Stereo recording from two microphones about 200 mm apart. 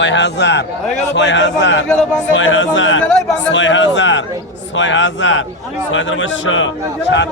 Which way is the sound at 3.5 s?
65° left (ahead or behind).